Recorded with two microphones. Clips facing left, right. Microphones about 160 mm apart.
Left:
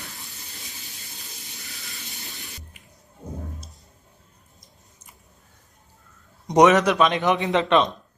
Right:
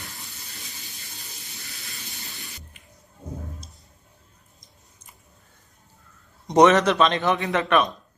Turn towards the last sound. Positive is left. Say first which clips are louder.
# left 2 dB
turn(degrees=20)  # may be behind; listen again after turning